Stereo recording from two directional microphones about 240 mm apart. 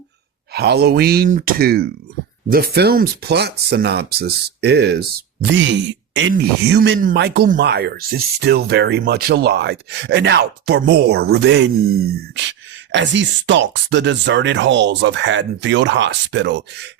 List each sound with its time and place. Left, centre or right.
0.5 s speech: right